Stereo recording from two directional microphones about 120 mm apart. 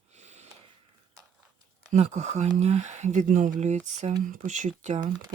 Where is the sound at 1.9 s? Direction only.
70° right (ahead or behind); by 5.0 s 90° right.